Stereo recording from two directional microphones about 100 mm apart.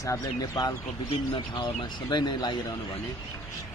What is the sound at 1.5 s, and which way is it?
Speech, 45° left (ahead or behind).